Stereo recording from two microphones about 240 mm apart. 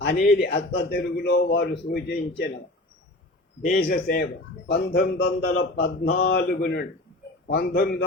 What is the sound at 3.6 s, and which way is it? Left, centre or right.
A man's voice, left.